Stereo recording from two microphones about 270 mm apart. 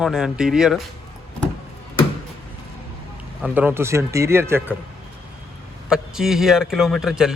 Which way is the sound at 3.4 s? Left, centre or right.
Centre.